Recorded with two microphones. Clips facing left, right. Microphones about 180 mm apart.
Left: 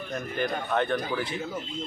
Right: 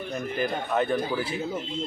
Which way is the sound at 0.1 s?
5° right (ahead or behind).